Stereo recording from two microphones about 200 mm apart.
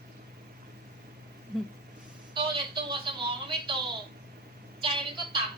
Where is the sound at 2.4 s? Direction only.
25° right (ahead or behind).